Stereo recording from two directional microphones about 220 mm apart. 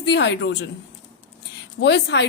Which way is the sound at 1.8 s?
50° left (ahead or behind).